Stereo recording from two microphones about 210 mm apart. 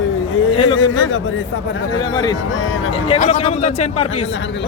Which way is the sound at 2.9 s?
30° left (ahead or behind).